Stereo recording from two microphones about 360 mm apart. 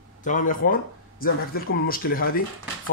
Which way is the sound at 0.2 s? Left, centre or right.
Left.